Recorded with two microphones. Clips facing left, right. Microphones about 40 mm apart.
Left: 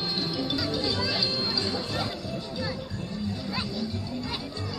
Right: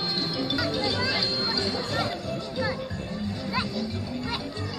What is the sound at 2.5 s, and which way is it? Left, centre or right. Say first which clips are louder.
Music: right 4 dB; right.